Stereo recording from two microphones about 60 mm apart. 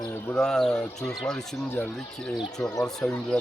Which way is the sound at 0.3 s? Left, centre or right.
Centre.